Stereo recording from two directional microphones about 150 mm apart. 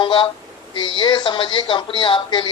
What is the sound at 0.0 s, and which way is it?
Speech, 30° left (ahead or behind).